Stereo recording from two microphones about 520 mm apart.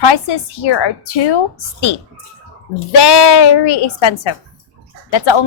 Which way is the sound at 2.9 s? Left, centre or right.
Left.